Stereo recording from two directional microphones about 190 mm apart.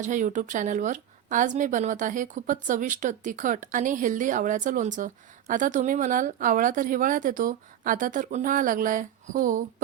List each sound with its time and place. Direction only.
0.0 s speech: 40° right (ahead or behind)